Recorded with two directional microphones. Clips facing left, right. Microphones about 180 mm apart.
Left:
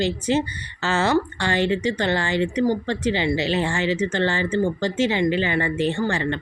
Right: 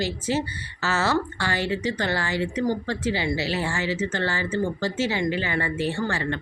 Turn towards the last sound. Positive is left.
turn(degrees=20)  # may be behind; listen again after turning